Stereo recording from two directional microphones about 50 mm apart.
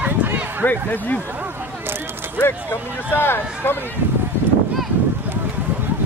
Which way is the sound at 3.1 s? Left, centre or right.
Left.